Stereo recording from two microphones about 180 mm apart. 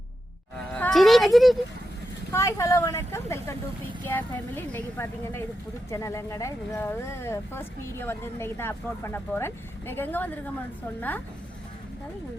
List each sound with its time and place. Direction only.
0.7 s music: 5° left (ahead or behind)
2.3 s speech: 15° left (ahead or behind)